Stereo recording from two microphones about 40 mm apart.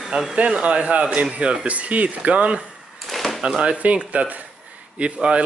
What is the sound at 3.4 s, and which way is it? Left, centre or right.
Speech, right.